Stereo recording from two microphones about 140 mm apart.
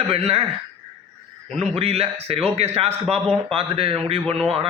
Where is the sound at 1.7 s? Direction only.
45° right (ahead or behind).